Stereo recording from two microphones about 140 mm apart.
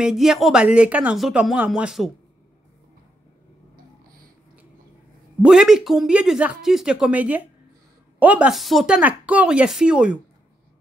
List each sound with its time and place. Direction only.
0.0 s speech: 5° right (ahead or behind)
5.4 s speech: 5° right (ahead or behind)